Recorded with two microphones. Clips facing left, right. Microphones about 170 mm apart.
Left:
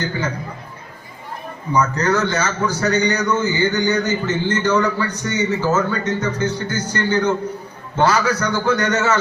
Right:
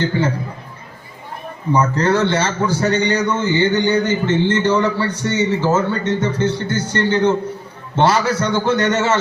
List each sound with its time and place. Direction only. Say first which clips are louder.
0.0 s a man's voice: right 5 dB; 30° right (ahead or behind)
1.7 s a man's voice: right 2 dB; 30° right (ahead or behind)